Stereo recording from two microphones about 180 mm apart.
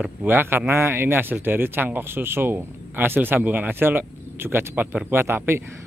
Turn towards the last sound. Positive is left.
turn(degrees=-15)  # may be behind; listen again after turning